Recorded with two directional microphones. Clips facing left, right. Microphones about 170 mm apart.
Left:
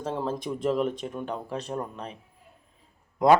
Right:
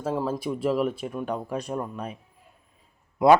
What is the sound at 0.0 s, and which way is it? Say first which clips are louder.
Speech: right 3 dB; 10° right (ahead or behind).